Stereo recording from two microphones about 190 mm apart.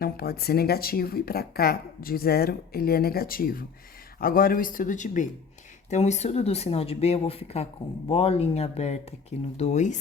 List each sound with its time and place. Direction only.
0.0 s speech: 55° left (ahead or behind)